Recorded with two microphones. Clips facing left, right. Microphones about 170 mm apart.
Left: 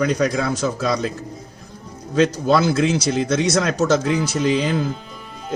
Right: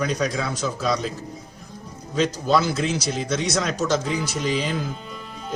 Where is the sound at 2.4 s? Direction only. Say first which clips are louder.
Left 4 dB; 70° left (ahead or behind); by 3.4 s 90° left.